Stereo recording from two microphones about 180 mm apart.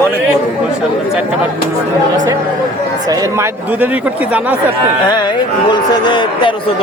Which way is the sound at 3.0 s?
15° right (ahead or behind).